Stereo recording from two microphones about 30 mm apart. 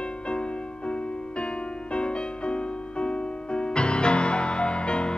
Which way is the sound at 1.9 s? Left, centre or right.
Left.